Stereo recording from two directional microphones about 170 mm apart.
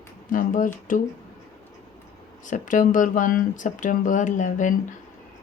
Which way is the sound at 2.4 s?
50° left (ahead or behind).